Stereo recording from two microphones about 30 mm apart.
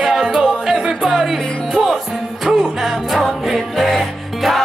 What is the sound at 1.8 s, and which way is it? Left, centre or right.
Music, right.